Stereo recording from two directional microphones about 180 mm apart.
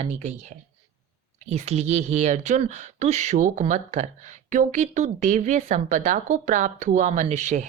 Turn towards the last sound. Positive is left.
turn(degrees=-40)  # may be behind; listen again after turning